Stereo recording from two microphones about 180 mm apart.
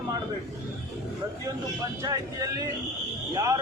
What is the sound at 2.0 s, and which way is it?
Speech, 20° right (ahead or behind).